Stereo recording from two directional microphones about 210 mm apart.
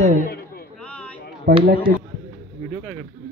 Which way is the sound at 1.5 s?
45° right (ahead or behind).